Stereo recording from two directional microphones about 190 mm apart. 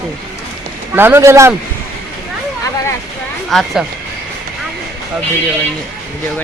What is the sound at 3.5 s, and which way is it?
Speech, centre (ahead or behind).